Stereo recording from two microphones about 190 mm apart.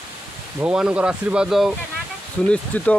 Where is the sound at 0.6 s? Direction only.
5° right (ahead or behind).